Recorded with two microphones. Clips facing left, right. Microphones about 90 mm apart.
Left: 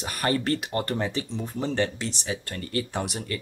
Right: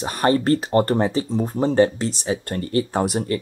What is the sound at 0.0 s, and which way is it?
Speech, 30° right (ahead or behind).